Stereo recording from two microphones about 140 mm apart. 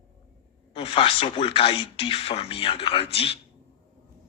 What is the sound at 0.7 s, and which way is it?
Speech, 45° left (ahead or behind).